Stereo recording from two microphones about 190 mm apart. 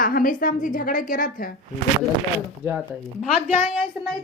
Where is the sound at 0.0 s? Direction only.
45° left (ahead or behind).